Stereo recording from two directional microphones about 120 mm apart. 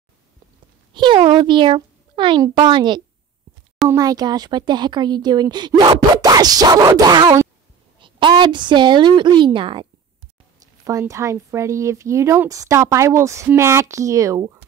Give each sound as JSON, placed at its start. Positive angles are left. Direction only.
{"t": 0.9, "sound": "a child's voice", "side_deg": -40}
{"t": 10.8, "sound": "speech", "side_deg": -25}